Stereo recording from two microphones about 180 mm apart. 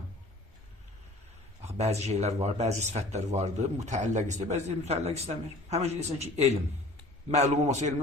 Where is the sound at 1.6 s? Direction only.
35° right (ahead or behind).